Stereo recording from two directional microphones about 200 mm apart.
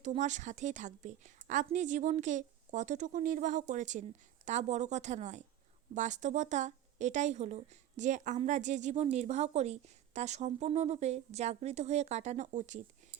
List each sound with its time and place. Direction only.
0.0 s speech: 35° right (ahead or behind)